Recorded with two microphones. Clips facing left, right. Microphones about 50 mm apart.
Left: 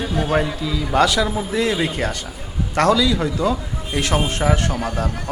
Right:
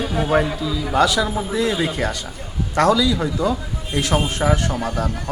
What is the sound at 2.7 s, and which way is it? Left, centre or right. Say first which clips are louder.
Speech: even; left.